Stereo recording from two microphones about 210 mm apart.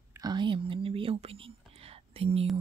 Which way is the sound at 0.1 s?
20° right (ahead or behind).